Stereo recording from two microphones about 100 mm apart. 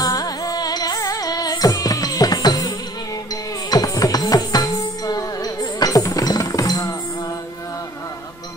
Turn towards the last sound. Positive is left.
turn(degrees=35)  # may be behind; listen again after turning